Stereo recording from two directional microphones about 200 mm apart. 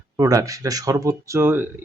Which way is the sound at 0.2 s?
15° right (ahead or behind).